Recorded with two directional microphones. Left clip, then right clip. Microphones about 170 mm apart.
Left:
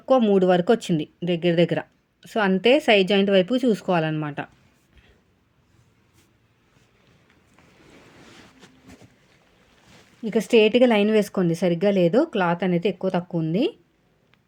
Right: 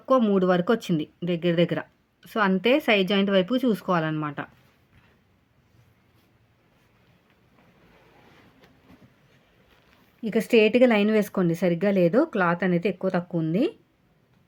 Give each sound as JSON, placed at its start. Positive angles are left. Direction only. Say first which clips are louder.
{"t": 0.0, "sound": "speech", "louder": "left 3 dB", "side_deg": 15}
{"t": 10.2, "sound": "a woman's voice", "louder": "left 2 dB", "side_deg": 15}